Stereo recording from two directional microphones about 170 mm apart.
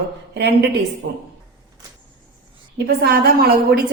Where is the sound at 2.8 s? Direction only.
70° right (ahead or behind).